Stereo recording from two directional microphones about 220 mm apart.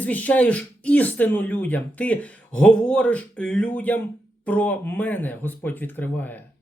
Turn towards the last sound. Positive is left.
turn(degrees=10)  # may be behind; listen again after turning